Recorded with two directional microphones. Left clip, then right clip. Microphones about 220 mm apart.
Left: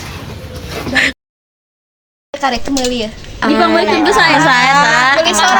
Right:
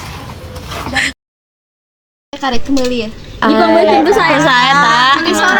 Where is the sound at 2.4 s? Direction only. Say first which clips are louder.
Even; 20° left (ahead or behind).